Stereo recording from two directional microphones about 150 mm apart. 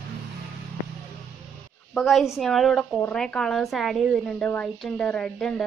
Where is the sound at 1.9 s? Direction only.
Centre (ahead or behind).